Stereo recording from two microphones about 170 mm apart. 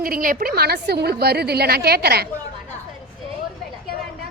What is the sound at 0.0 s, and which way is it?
A woman's voice, 60° right (ahead or behind).